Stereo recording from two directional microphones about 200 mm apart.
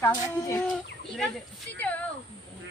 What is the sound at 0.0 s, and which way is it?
Speech, 15° left (ahead or behind).